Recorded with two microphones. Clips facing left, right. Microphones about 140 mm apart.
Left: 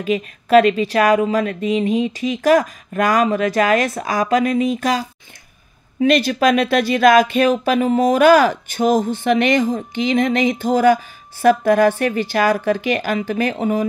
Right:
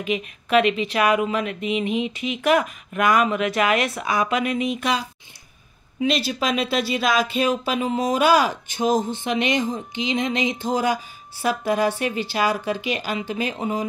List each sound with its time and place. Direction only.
0.0 s a woman's voice: 40° left (ahead or behind)
5.9 s speech: 50° left (ahead or behind)